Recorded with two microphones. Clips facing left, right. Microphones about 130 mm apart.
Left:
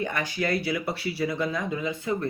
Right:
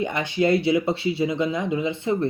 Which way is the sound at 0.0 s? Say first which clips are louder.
Right 6 dB; 20° right (ahead or behind).